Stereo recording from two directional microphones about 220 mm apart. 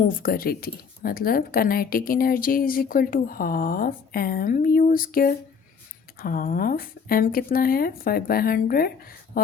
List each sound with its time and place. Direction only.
0.0 s speech: 40° left (ahead or behind)